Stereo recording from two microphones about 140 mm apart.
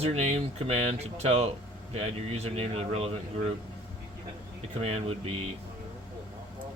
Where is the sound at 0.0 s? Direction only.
45° right (ahead or behind).